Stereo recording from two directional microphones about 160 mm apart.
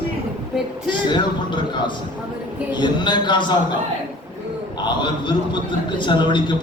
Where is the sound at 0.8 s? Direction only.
30° left (ahead or behind).